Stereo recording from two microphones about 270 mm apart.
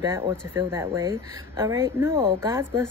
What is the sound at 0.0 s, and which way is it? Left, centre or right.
A woman's voice, centre.